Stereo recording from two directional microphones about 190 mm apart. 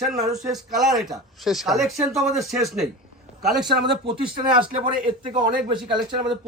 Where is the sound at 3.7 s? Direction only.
60° right (ahead or behind).